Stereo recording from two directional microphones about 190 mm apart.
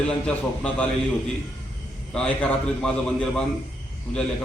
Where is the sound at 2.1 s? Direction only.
5° left (ahead or behind).